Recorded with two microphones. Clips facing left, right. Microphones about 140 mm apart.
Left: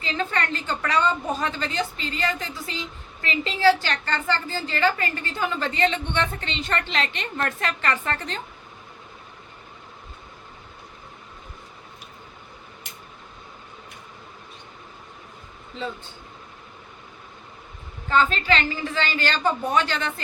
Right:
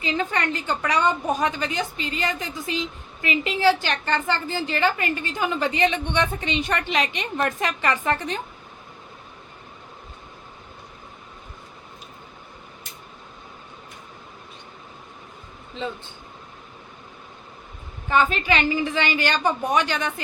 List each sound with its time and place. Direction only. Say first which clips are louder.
0.0 s a woman's voice: right 2 dB; 15° right (ahead or behind)
18.1 s a woman's voice: even; 15° right (ahead or behind)